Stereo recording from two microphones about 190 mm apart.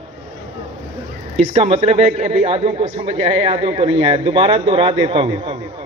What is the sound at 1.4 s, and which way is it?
A man's voice, 30° right (ahead or behind).